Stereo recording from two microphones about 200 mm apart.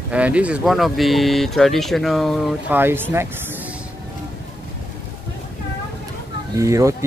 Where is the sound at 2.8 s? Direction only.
10° right (ahead or behind).